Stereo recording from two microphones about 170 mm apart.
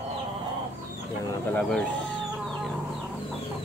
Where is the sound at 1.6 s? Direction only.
5° left (ahead or behind).